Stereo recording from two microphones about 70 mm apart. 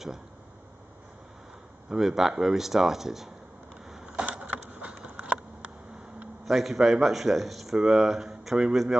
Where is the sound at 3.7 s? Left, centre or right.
Centre.